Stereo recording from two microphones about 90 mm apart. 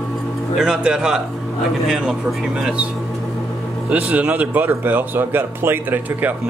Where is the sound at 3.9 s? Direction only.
15° right (ahead or behind).